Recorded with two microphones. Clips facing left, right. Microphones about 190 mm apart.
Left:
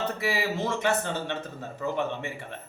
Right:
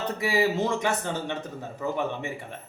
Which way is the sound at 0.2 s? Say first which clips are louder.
Right 4 dB; 15° right (ahead or behind).